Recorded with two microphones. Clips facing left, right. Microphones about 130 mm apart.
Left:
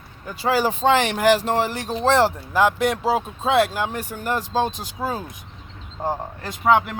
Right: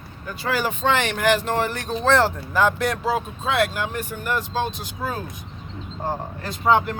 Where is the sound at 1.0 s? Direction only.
30° left (ahead or behind).